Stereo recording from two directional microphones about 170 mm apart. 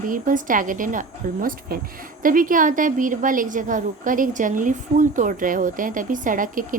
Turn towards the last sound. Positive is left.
turn(degrees=-55)  # may be behind; listen again after turning